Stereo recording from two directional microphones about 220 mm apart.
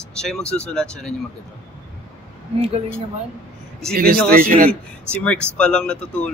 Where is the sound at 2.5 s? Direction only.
25° right (ahead or behind).